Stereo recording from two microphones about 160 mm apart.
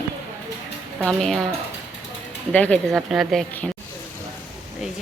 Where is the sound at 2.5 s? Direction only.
10° left (ahead or behind).